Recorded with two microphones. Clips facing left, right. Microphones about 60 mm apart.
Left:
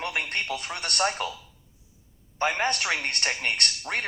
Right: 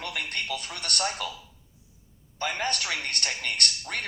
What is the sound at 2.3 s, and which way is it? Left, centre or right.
A man's voice, left.